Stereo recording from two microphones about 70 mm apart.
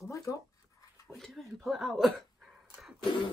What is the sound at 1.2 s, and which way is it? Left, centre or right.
Speech, centre.